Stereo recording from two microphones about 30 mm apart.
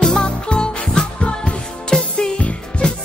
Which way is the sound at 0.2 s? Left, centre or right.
Left.